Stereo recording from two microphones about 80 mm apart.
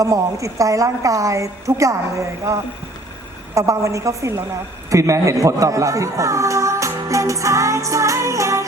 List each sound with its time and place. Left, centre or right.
0.0 s a woman's voice: right